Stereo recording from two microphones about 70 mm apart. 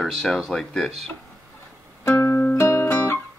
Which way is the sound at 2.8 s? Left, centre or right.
Left.